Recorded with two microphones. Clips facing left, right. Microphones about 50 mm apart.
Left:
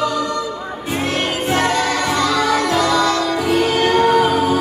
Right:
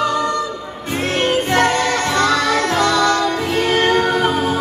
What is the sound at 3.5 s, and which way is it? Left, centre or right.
Music, right.